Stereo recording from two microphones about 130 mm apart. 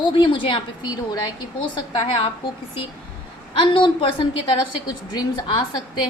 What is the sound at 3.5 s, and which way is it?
A woman's voice, 40° left (ahead or behind).